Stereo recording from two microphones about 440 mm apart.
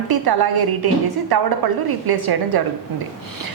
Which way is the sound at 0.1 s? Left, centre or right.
Right.